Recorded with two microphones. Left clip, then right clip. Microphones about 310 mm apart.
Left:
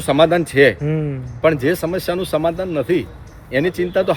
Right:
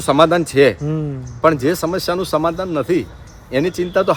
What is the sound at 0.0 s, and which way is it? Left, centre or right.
A man's voice, centre.